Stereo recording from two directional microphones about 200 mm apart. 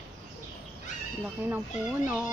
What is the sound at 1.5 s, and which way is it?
Speech, 10° right (ahead or behind).